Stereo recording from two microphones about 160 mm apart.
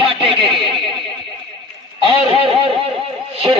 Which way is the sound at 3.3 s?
35° right (ahead or behind).